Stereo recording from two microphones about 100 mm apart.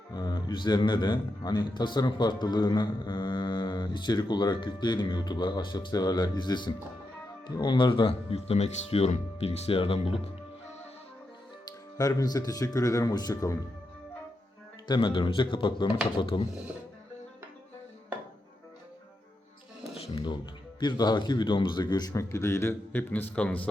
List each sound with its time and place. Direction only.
0.1 s speech: 45° left (ahead or behind); by 10.2 s 75° left (ahead or behind)
11.9 s speech: 40° left (ahead or behind)
14.8 s speech: 50° left (ahead or behind)
20.1 s speech: 50° left (ahead or behind); by 23.6 s 15° left (ahead or behind)